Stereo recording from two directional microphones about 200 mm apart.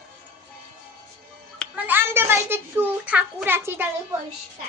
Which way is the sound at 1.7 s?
10° right (ahead or behind).